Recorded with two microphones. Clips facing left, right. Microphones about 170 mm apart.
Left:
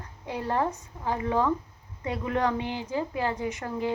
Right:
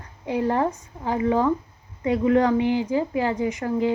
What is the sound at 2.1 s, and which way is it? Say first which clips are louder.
Speech: right 11 dB; 60° right (ahead or behind).